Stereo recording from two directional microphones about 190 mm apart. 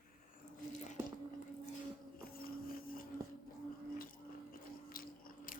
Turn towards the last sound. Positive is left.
turn(degrees=50)  # may be behind; listen again after turning